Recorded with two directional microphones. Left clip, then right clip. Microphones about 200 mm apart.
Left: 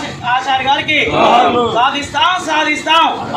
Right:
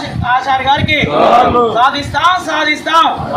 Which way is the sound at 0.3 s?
15° left (ahead or behind).